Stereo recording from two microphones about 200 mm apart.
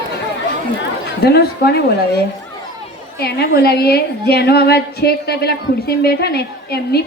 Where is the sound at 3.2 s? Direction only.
50° left (ahead or behind).